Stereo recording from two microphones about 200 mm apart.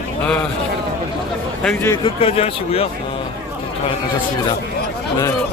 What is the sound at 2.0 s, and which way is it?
Speech, 30° left (ahead or behind).